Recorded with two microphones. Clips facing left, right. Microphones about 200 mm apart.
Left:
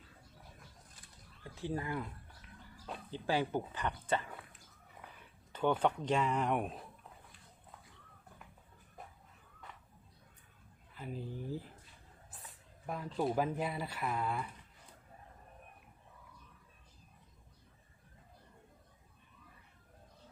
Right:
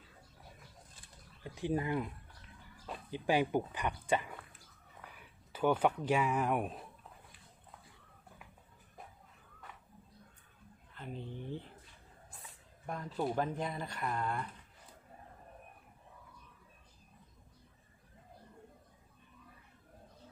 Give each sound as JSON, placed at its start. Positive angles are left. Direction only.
{"t": 1.5, "sound": "speech", "side_deg": -15}
{"t": 3.1, "sound": "speech", "side_deg": -15}
{"t": 5.5, "sound": "speech", "side_deg": -10}
{"t": 10.9, "sound": "speech", "side_deg": 5}